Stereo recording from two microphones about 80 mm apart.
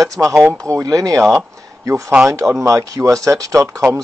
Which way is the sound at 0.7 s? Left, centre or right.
Right.